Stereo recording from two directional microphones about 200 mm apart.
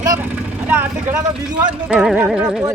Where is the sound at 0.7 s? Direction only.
10° right (ahead or behind).